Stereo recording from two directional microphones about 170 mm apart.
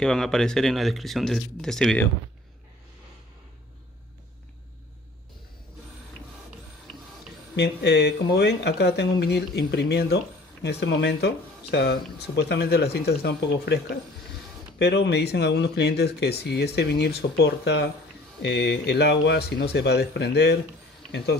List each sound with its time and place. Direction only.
0.0 s speech: 5° left (ahead or behind)
7.5 s speech: 90° left